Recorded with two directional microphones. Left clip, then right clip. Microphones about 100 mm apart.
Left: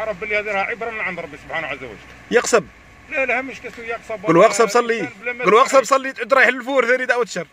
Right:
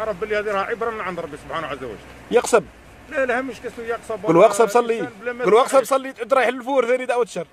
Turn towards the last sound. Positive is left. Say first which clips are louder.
# left 2 dB
turn(degrees=5)  # may be behind; listen again after turning